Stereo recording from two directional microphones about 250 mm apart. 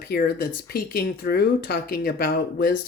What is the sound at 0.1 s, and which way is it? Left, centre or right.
Speech, left.